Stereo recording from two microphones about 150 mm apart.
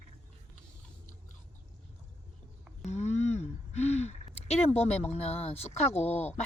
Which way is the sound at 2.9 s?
50° left (ahead or behind).